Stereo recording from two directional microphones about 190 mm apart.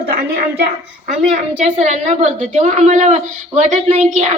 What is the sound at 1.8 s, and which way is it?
A child's voice, 40° right (ahead or behind).